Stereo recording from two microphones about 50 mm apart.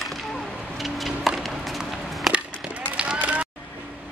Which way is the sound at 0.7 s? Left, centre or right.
Centre.